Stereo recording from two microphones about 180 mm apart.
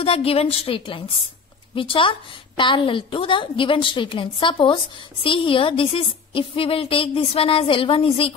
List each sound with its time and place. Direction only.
0.0 s a woman's voice: 30° left (ahead or behind)